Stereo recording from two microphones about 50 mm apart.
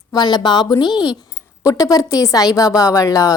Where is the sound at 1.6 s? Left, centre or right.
Left.